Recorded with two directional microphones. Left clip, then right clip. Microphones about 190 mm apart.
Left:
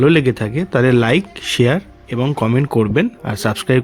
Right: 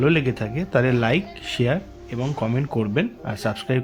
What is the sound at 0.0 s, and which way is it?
Speech, 45° left (ahead or behind).